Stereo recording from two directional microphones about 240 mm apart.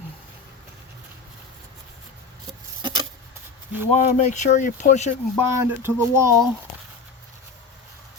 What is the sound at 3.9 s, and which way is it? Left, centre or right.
Speech, left.